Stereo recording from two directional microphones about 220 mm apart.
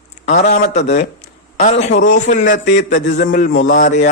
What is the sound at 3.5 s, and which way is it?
Speech, 60° left (ahead or behind).